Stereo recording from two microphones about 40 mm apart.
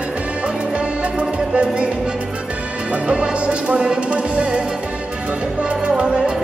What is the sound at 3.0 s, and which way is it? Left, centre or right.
Music, right.